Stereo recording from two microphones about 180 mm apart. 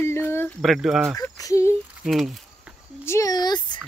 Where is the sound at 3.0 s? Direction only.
15° left (ahead or behind).